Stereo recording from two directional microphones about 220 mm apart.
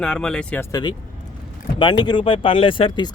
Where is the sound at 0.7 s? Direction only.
20° left (ahead or behind).